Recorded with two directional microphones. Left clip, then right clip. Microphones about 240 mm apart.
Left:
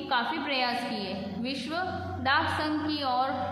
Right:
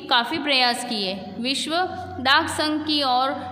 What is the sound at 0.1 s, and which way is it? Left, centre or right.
A woman's voice, right.